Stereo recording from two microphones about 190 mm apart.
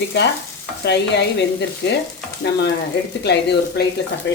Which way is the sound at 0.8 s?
60° left (ahead or behind).